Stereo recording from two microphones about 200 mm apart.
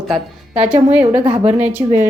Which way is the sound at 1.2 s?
30° right (ahead or behind).